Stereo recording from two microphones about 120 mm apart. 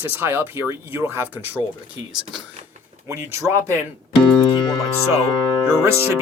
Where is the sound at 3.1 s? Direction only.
25° right (ahead or behind).